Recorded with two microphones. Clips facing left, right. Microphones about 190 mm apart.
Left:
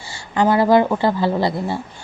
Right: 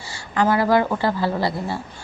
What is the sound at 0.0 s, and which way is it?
Speech, 25° left (ahead or behind).